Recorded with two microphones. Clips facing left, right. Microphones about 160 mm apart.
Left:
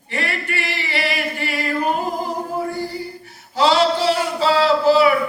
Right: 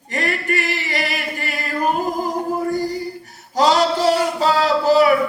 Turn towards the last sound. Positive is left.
turn(degrees=-45)  # may be behind; listen again after turning